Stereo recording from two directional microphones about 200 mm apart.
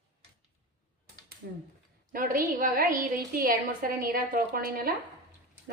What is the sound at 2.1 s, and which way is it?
A woman's voice, 45° right (ahead or behind).